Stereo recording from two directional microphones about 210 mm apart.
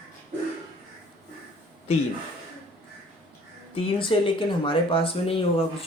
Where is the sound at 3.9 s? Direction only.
25° left (ahead or behind).